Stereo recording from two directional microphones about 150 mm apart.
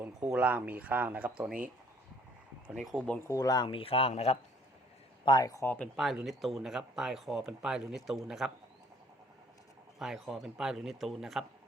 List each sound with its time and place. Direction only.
0.3 s speech: 10° right (ahead or behind)
2.6 s speech: centre (ahead or behind)
3.2 s speech: 25° left (ahead or behind); by 4.4 s 45° left (ahead or behind)
5.2 s speech: 25° left (ahead or behind)
5.7 s speech: 5° left (ahead or behind)
10.0 s speech: centre (ahead or behind)